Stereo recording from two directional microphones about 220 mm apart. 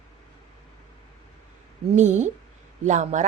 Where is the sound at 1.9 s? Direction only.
35° right (ahead or behind).